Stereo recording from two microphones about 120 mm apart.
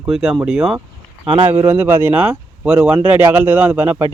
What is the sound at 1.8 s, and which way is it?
A man's voice, 15° right (ahead or behind).